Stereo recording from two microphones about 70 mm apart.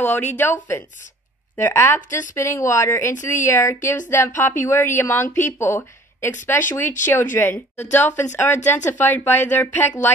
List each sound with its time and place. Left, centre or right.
0.0 s a woman's voice: left